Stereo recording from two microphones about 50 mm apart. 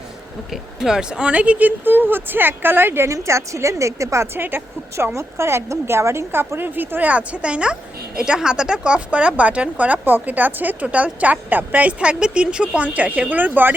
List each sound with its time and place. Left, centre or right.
0.5 s speech: centre; by 3.1 s right
3.1 s a woman's voice: right
4.4 s speech: right
5.1 s a woman's voice: right
7.1 s a woman's voice: right